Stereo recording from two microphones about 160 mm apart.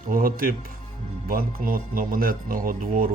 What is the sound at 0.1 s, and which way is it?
Speech, 65° right (ahead or behind).